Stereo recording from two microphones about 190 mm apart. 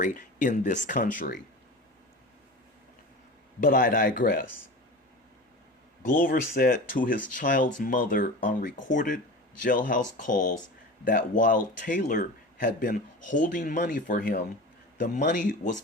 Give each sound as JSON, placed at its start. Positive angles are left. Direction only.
{"t": 0.0, "sound": "speech", "side_deg": 45}
{"t": 3.6, "sound": "speech", "side_deg": 50}
{"t": 6.1, "sound": "speech", "side_deg": 45}